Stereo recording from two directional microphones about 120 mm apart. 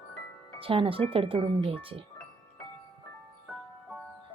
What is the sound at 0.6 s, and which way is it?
A woman's voice, 50° right (ahead or behind).